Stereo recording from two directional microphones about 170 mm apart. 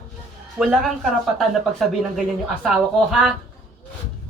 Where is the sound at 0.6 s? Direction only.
Centre (ahead or behind).